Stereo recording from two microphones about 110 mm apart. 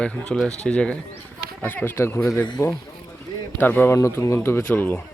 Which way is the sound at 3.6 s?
20° left (ahead or behind).